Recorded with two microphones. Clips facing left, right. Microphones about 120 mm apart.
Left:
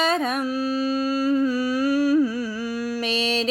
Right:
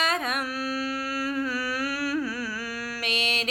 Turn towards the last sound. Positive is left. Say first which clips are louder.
# left 7 dB
turn(degrees=30)  # may be behind; listen again after turning